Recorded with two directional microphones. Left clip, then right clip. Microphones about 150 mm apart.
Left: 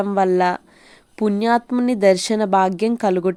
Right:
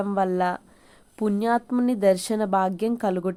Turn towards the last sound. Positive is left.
turn(degrees=30)  # may be behind; listen again after turning